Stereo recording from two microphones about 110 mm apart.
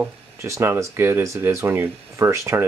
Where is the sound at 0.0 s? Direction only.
25° right (ahead or behind).